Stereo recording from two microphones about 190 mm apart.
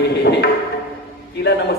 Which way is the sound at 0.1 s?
60° left (ahead or behind).